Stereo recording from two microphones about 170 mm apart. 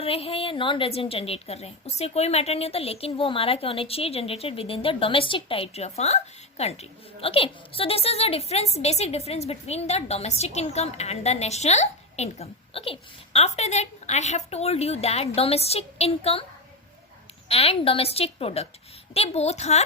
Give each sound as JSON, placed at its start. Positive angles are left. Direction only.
{"t": 0.0, "sound": "a woman's voice", "side_deg": 35}
{"t": 17.5, "sound": "a woman's voice", "side_deg": 35}